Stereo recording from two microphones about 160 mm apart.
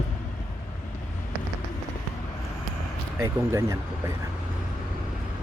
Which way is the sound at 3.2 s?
20° right (ahead or behind).